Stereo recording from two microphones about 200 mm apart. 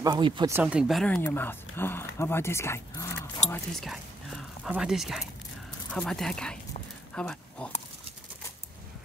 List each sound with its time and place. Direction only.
0.0 s speech: 25° right (ahead or behind)
0.5 s speech: 10° right (ahead or behind); by 3.1 s 15° left (ahead or behind)
3.4 s speech: 5° left (ahead or behind)